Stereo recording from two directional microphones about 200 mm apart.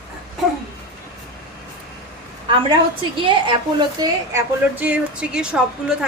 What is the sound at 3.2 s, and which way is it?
A woman's voice, 25° right (ahead or behind).